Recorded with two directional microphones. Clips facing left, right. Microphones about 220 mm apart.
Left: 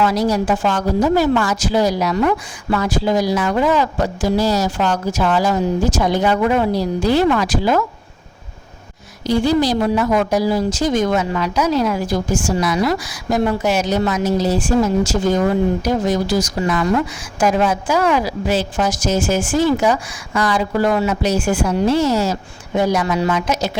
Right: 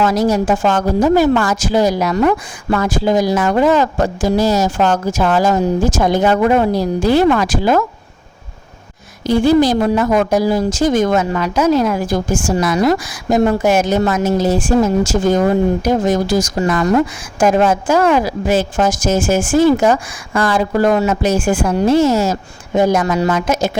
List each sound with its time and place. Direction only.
0.0 s speech: 45° right (ahead or behind)
9.2 s a woman's voice: 50° right (ahead or behind)